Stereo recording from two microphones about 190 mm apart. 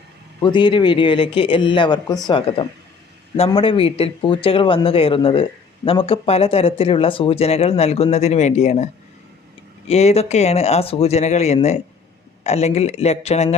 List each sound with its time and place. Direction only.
0.4 s speech: 25° left (ahead or behind)